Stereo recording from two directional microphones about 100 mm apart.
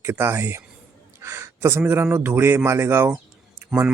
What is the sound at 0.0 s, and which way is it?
Speech, 25° right (ahead or behind).